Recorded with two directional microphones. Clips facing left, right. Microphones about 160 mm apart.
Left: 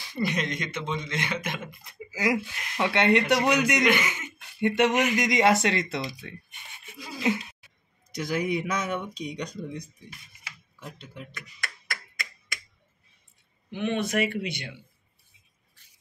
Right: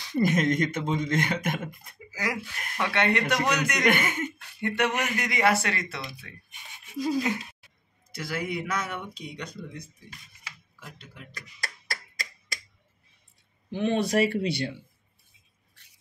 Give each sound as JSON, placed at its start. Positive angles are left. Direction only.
{"t": 0.2, "sound": "speech", "side_deg": -45}
{"t": 2.0, "sound": "speech", "side_deg": 15}
{"t": 3.9, "sound": "speech", "side_deg": -50}
{"t": 4.4, "sound": "speech", "side_deg": 20}
{"t": 5.9, "sound": "speech", "side_deg": 35}
{"t": 7.0, "sound": "speech", "side_deg": -45}
{"t": 8.2, "sound": "speech", "side_deg": 20}
{"t": 11.3, "sound": "finger snapping", "side_deg": -35}
{"t": 13.7, "sound": "speech", "side_deg": -35}